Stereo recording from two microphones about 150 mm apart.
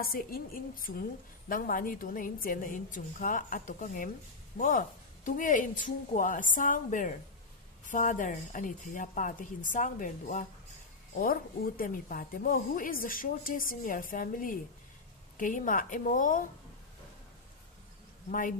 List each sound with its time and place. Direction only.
0.0 s a woman's voice: 80° left; by 10.4 s 60° left (ahead or behind)
11.2 s a woman's voice: 75° left (ahead or behind)
18.3 s a woman's voice: 60° left (ahead or behind)